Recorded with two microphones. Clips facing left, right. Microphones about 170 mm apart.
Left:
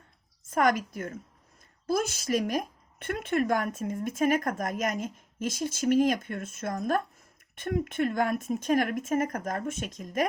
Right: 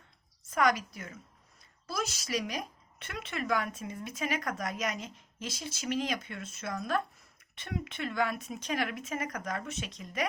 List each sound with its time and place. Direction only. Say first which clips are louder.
0.5 s a woman's voice: left 3 dB; 50° left (ahead or behind)